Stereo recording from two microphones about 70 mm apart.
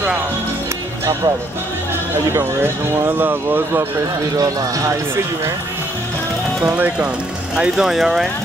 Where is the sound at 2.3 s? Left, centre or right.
Right.